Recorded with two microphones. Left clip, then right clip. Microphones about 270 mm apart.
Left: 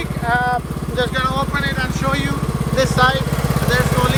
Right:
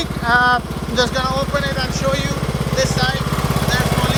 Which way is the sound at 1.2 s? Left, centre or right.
Centre.